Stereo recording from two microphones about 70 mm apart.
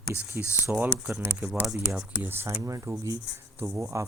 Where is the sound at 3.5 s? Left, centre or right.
Right.